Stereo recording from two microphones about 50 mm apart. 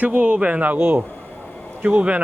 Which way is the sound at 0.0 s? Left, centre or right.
Right.